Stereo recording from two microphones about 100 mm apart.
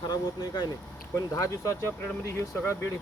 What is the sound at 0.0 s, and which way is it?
Speech, 45° left (ahead or behind).